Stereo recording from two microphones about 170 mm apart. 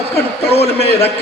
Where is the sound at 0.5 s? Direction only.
35° left (ahead or behind).